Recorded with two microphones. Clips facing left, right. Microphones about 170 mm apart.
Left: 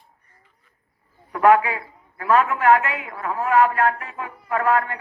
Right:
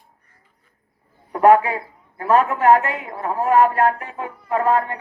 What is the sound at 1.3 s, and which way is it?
A man's voice, 35° right (ahead or behind).